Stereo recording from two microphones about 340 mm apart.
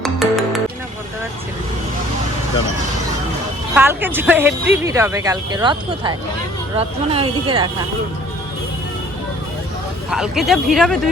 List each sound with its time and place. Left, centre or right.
0.0 s music: centre
3.8 s speech: centre
10.1 s speech: centre